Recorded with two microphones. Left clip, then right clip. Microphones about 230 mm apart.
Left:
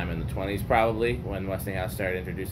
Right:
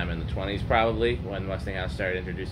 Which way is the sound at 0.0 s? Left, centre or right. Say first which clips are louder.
Even; centre.